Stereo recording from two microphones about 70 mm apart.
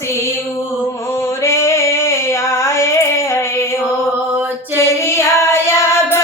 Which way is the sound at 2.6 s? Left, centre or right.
Left.